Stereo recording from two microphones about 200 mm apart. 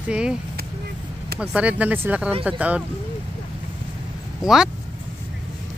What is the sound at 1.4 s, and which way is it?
Speech, 5° right (ahead or behind).